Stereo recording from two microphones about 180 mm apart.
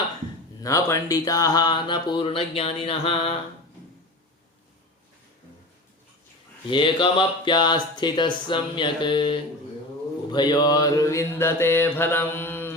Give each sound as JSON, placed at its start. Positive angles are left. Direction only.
{"t": 0.6, "sound": "speech", "side_deg": 15}
{"t": 6.7, "sound": "speech", "side_deg": 25}
{"t": 10.3, "sound": "mantra", "side_deg": 25}